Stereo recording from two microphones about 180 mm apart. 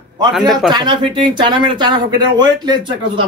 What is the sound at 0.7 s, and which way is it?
Speech, 25° right (ahead or behind).